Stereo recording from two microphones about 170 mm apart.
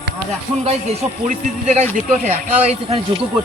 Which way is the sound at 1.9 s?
45° right (ahead or behind).